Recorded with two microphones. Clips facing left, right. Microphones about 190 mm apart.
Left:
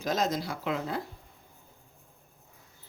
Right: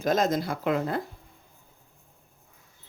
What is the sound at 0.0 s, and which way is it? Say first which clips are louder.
Speech: right 5 dB; 50° right (ahead or behind).